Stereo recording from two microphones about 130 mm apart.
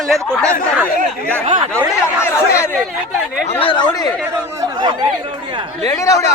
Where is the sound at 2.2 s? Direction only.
20° left (ahead or behind).